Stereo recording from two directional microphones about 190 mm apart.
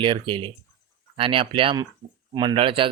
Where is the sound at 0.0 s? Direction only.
25° right (ahead or behind).